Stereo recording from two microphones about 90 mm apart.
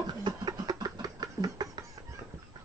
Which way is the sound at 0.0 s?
50° right (ahead or behind).